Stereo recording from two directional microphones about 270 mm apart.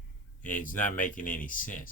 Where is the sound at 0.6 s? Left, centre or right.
Left.